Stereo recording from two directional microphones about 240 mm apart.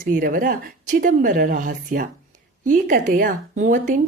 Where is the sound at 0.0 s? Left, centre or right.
Right.